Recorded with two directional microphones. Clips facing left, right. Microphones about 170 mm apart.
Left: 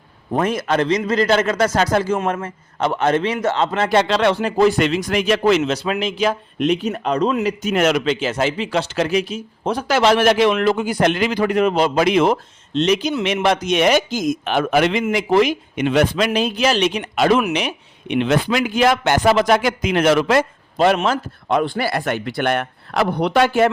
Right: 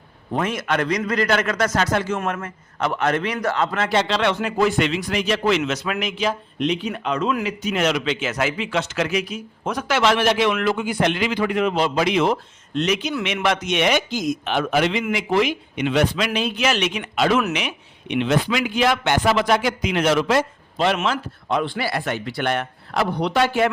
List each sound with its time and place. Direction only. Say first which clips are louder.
0.3 s a man's voice: left 4 dB; 35° left (ahead or behind)
3.8 s a man's voice: left 5 dB; 45° left (ahead or behind); by 6.1 s 30° left (ahead or behind)
6.1 s a man's voice: left 4 dB; 50° left (ahead or behind)
12.7 s a man's voice: left 4 dB; 30° left (ahead or behind); by 15.0 s 55° left (ahead or behind)
15.1 s a man's voice: left 4 dB; 40° left (ahead or behind)
18.1 s speech: left 3 dB; 55° left (ahead or behind)